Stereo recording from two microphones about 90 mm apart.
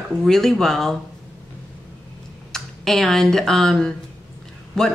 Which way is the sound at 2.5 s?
5° left (ahead or behind).